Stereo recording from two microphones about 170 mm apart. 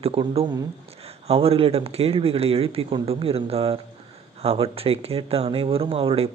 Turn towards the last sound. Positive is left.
turn(degrees=-35)  # may be behind; listen again after turning